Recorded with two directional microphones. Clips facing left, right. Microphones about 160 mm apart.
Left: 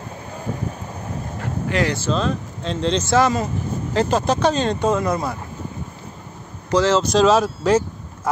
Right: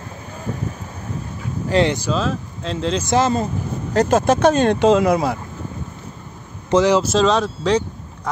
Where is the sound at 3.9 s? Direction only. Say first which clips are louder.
Right 4 dB; 45° right (ahead or behind).